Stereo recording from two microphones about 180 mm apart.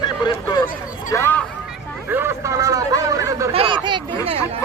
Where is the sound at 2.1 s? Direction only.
15° right (ahead or behind).